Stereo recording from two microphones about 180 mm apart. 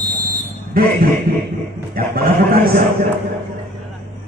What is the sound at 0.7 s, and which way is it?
Speech, 55° right (ahead or behind).